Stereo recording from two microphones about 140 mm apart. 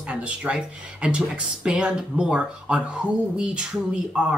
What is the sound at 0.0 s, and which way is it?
Speech, 10° right (ahead or behind).